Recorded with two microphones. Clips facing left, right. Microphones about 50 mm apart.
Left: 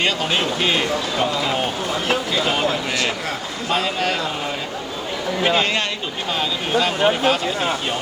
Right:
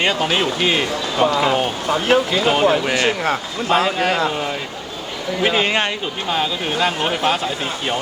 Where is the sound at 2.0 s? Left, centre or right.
Right.